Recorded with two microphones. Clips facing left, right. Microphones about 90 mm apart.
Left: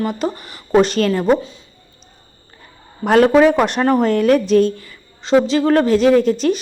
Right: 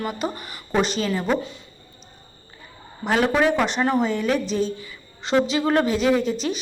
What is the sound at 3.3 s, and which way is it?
A woman's voice, 40° left (ahead or behind).